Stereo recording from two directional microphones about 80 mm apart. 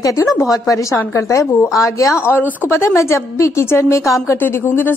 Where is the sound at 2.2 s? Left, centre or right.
Left.